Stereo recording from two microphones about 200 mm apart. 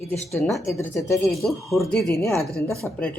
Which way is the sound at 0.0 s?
30° left (ahead or behind).